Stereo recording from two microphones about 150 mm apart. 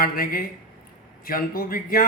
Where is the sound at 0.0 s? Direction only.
75° left (ahead or behind).